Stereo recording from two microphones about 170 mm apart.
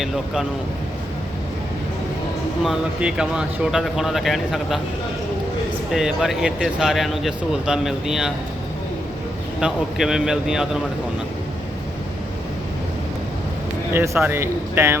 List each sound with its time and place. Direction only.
2.6 s speech: 5° right (ahead or behind)
5.9 s speech: centre (ahead or behind)
9.6 s speech: 5° right (ahead or behind)
13.9 s a man's voice: 15° right (ahead or behind)